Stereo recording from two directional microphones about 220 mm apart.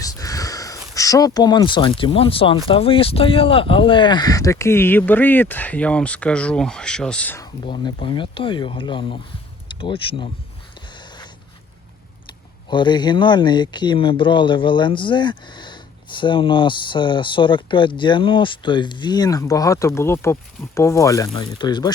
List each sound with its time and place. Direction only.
0.0 s a sound: 15° left (ahead or behind)
2.6 s speech: 25° left (ahead or behind); by 7.4 s 5° left (ahead or behind)
7.6 s speech: 20° left (ahead or behind)
12.7 s speech: 20° left (ahead or behind)